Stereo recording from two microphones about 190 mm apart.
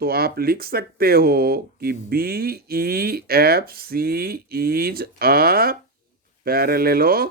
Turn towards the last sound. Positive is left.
turn(degrees=-50)  # may be behind; listen again after turning